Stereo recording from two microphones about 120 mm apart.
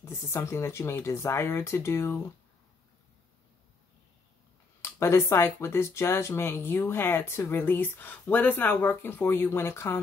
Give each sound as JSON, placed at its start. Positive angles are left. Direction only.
{"t": 0.0, "sound": "speech", "side_deg": 20}
{"t": 4.8, "sound": "speech", "side_deg": 20}